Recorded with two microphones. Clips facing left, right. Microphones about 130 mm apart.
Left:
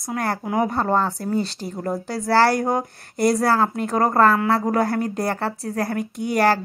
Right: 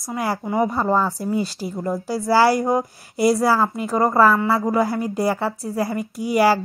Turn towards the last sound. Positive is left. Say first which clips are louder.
# right 2 dB
turn(degrees=-5)  # may be behind; listen again after turning